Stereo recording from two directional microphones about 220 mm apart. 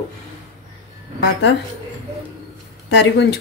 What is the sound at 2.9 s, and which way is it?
Speech, 50° left (ahead or behind).